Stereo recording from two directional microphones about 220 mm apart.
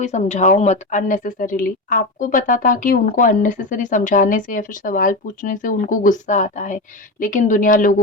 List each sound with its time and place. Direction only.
0.0 s a woman's voice: 30° left (ahead or behind)